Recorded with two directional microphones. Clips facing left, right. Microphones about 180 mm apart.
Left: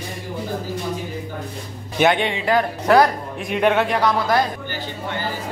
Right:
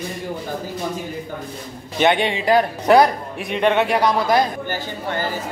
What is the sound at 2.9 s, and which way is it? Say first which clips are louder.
Speech: right 1 dB; 20° right (ahead or behind).